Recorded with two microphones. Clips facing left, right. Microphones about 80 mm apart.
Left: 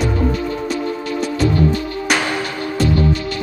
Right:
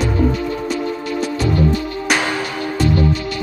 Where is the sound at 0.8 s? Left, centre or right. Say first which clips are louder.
Even; centre.